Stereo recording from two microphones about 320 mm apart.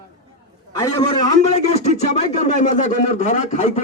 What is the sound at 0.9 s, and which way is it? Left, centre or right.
A man's voice, centre.